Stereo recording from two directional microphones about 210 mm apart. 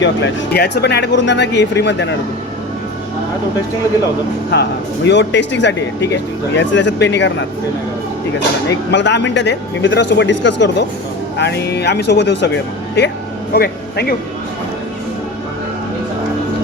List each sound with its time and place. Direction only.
0.0 s speech: 55° left (ahead or behind)
4.5 s speech: 55° left (ahead or behind)
8.9 s speech: 55° left (ahead or behind)